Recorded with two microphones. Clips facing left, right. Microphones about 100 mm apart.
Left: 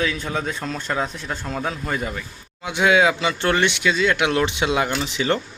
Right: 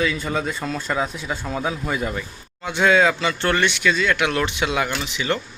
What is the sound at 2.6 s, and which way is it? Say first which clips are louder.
A man's voice: even; 10° left (ahead or behind).